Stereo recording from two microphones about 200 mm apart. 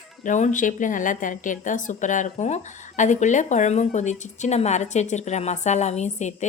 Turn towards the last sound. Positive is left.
turn(degrees=35)  # may be behind; listen again after turning